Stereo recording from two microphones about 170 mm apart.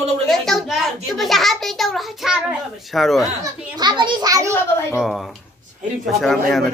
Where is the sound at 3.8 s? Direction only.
25° right (ahead or behind).